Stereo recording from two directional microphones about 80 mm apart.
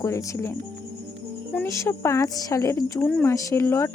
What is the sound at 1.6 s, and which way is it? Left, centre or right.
A woman's voice, left.